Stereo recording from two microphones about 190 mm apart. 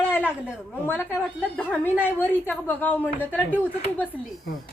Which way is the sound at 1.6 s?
10° left (ahead or behind).